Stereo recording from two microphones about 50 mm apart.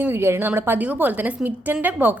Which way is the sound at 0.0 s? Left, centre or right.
Right.